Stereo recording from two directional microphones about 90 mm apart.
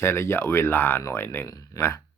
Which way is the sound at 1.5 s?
40° left (ahead or behind).